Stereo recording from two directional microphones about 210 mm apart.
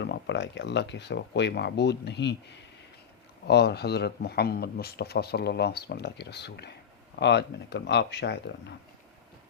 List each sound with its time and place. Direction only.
0.0 s a man's voice: 55° left (ahead or behind)